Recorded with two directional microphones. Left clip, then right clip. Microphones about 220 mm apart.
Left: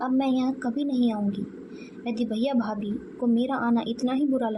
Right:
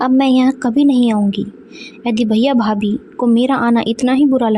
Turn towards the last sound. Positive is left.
turn(degrees=-40)  # may be behind; listen again after turning